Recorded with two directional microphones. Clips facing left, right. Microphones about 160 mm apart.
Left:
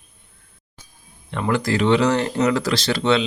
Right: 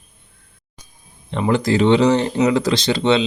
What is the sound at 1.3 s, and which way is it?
Speech, 20° right (ahead or behind).